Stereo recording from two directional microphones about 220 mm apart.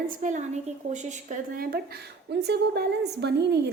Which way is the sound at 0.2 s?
35° right (ahead or behind).